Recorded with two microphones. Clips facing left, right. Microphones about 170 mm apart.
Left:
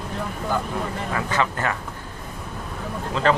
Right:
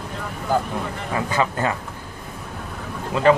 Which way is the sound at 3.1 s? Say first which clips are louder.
Right 5 dB; 15° right (ahead or behind).